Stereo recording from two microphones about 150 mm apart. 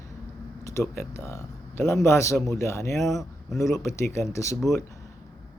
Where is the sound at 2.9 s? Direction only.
Centre (ahead or behind).